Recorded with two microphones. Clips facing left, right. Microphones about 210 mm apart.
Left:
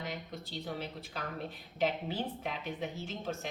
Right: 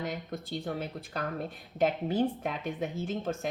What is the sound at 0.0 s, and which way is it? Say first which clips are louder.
A woman's voice: right 5 dB; 50° right (ahead or behind).